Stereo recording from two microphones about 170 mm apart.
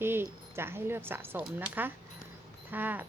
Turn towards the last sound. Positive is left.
turn(degrees=-10)  # may be behind; listen again after turning